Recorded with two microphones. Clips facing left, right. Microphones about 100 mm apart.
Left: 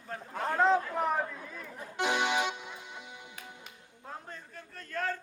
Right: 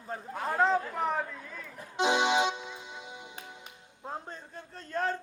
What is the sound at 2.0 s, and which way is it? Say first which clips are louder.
Music: right 4 dB; 20° right (ahead or behind).